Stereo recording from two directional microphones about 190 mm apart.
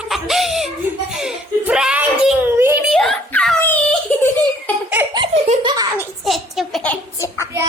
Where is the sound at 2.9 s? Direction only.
Centre (ahead or behind).